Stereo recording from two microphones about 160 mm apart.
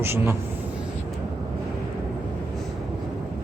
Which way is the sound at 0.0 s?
15° right (ahead or behind).